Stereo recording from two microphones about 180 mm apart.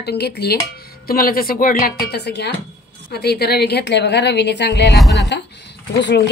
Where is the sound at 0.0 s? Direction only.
65° left (ahead or behind).